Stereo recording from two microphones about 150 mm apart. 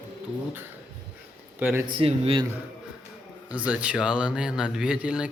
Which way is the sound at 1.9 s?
40° right (ahead or behind).